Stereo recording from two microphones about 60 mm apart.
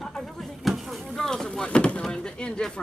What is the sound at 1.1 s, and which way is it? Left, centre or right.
Speech, centre.